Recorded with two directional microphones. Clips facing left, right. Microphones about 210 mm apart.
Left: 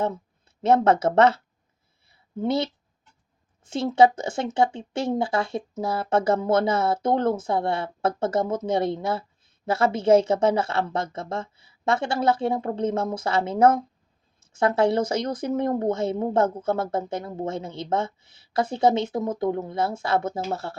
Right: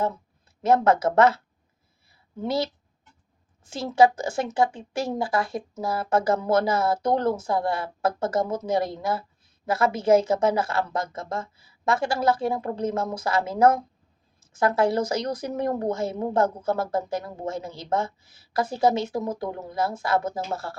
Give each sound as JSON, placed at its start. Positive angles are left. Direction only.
{"t": 0.6, "sound": "speech", "side_deg": 25}
{"t": 2.0, "sound": "a sound", "side_deg": 25}
{"t": 3.7, "sound": "speech", "side_deg": 25}